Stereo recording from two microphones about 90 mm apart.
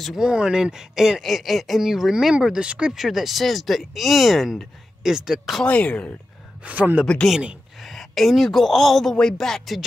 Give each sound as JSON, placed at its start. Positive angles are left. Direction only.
{"t": 0.0, "sound": "speech", "side_deg": -5}
{"t": 5.6, "sound": "speech", "side_deg": 15}
{"t": 6.6, "sound": "speech", "side_deg": -20}
{"t": 7.2, "sound": "speech", "side_deg": -5}